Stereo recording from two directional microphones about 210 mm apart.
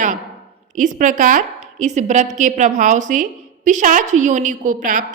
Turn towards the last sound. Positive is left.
turn(degrees=-40)  # may be behind; listen again after turning